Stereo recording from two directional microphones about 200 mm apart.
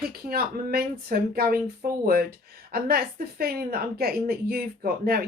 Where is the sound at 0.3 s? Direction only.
50° right (ahead or behind).